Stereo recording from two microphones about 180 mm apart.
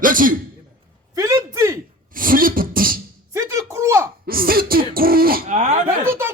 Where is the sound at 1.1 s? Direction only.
20° right (ahead or behind).